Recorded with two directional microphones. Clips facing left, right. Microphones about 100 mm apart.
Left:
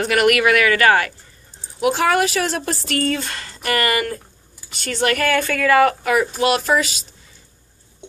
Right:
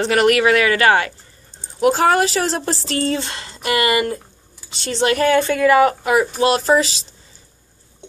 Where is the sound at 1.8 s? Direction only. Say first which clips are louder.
Right 2 dB; 40° right (ahead or behind).